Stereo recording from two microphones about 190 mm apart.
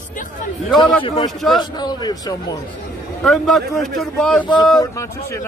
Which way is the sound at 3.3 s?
Centre (ahead or behind).